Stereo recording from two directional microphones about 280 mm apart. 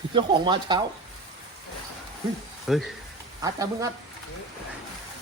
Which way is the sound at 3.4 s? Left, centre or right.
Centre.